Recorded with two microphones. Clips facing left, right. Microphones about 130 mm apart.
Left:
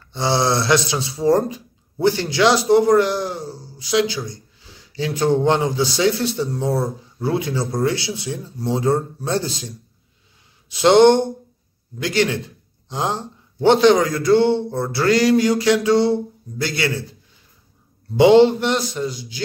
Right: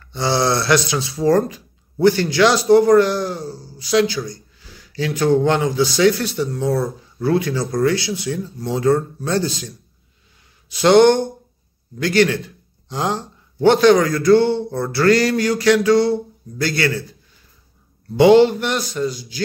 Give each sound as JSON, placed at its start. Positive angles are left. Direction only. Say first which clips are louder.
{"t": 0.1, "sound": "a man's voice", "louder": "right 1 dB", "side_deg": 25}
{"t": 10.7, "sound": "a man's voice", "louder": "even", "side_deg": 20}
{"t": 18.2, "sound": "a man's voice", "louder": "even", "side_deg": 25}